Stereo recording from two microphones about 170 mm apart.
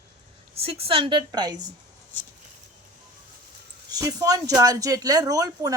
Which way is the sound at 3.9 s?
20° right (ahead or behind).